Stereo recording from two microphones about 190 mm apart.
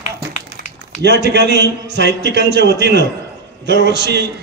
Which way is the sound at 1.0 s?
60° right (ahead or behind).